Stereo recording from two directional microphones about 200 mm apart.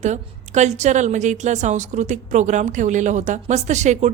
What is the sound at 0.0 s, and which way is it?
A woman's voice, 35° right (ahead or behind).